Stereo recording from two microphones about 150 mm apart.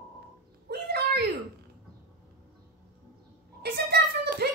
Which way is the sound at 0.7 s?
90° right.